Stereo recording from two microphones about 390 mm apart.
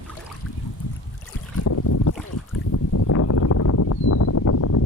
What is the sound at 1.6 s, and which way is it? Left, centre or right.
Boat, left.